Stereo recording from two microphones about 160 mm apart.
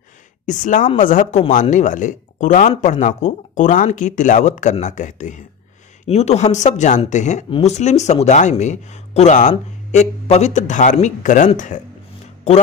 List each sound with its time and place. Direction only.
0.5 s speech: 50° left (ahead or behind)
7.4 s speech: 30° left (ahead or behind)
7.7 s speech: 45° left (ahead or behind)